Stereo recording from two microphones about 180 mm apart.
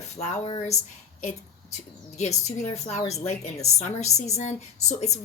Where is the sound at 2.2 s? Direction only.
40° left (ahead or behind).